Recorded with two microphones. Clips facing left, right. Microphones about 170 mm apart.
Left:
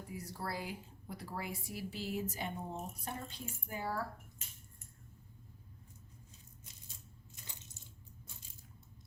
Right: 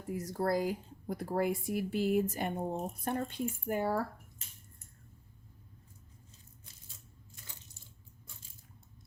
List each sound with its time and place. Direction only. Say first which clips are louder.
0.1 s speech: right 12 dB; 50° right (ahead or behind)